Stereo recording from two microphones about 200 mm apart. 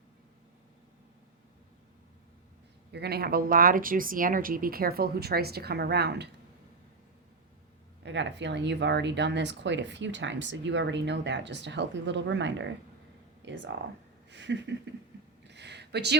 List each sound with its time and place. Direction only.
2.9 s speech: 55° right (ahead or behind)
8.0 s speech: 60° right (ahead or behind)
13.7 s speech: 65° right (ahead or behind)
14.3 s a sound: 60° right (ahead or behind)